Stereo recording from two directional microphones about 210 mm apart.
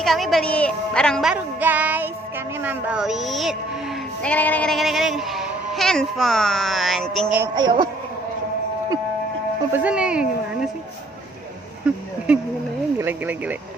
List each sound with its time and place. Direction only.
0.0 s speech: centre (ahead or behind)
7.5 s speech: 20° right (ahead or behind)
9.7 s speech: 5° right (ahead or behind)
11.9 s speech: 5° right (ahead or behind)